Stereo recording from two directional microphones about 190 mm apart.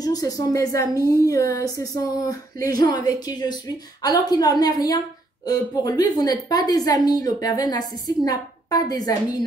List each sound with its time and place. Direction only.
0.0 s a woman's voice: 20° left (ahead or behind)